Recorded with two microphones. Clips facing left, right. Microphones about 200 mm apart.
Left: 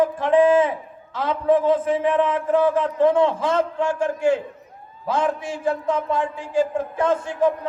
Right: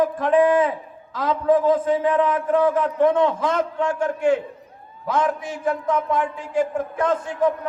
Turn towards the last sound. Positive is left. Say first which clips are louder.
# left 1 dB
turn(degrees=25)  # may be behind; listen again after turning